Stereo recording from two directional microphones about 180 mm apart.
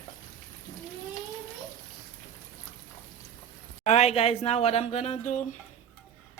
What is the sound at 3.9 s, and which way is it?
Speech, 35° left (ahead or behind).